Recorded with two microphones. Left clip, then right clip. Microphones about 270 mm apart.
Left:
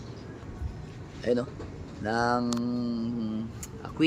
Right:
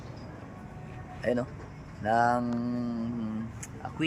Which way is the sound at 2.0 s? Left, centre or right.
Centre.